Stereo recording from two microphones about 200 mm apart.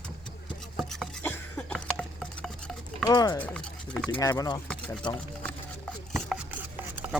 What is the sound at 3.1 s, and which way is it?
Speech, 20° left (ahead or behind).